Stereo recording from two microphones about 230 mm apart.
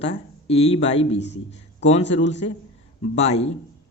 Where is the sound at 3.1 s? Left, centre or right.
Left.